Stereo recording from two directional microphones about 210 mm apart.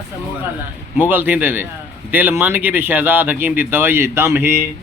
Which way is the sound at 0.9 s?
10° right (ahead or behind).